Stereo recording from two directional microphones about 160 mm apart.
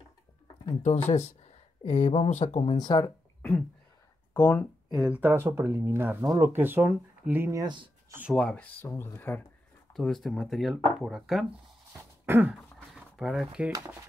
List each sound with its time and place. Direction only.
0.8 s speech: 45° left (ahead or behind)
2.8 s speech: 25° left (ahead or behind)
4.3 s speech: 15° left (ahead or behind)
4.9 s speech: 5° right (ahead or behind)
7.6 s speech: 30° right (ahead or behind)
8.1 s speech: 10° right (ahead or behind)
8.4 s speech: 5° left (ahead or behind)
8.8 s speech: 15° left (ahead or behind)
9.9 s speech: centre (ahead or behind)
12.3 s speech: 10° right (ahead or behind)
12.5 s a sound: centre (ahead or behind)